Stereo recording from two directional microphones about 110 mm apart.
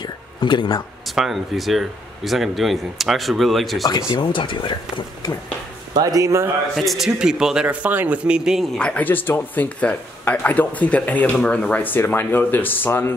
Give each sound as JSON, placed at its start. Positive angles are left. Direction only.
{"t": 0.0, "sound": "a sound", "side_deg": 45}
{"t": 1.1, "sound": "speech", "side_deg": 0}
{"t": 3.8, "sound": "speech", "side_deg": 40}
{"t": 5.9, "sound": "speech", "side_deg": -30}
{"t": 6.7, "sound": "a man's voice", "side_deg": 0}
{"t": 8.7, "sound": "speech", "side_deg": 10}